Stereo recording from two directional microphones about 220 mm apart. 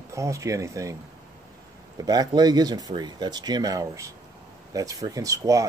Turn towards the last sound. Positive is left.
turn(degrees=-15)  # may be behind; listen again after turning